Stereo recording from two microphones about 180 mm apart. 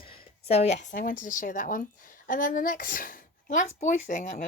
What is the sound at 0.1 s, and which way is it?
A woman's voice, 35° left (ahead or behind).